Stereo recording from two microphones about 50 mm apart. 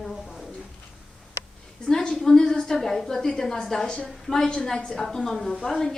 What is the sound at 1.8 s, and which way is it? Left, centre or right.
A woman's voice, centre.